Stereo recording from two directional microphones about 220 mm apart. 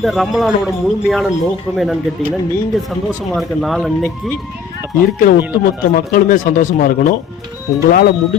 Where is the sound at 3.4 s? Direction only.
Centre (ahead or behind).